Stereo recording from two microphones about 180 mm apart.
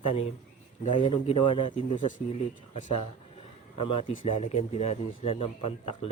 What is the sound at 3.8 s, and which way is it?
Speech, 30° left (ahead or behind).